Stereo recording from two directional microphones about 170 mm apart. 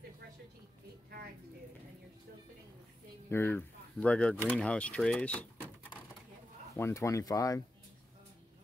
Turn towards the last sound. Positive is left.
turn(degrees=20)  # may be behind; listen again after turning